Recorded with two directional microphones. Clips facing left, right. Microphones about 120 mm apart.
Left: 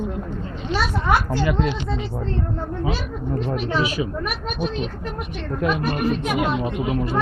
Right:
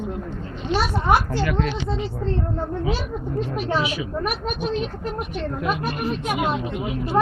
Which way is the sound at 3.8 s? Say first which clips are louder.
Left 3 dB; 40° left (ahead or behind).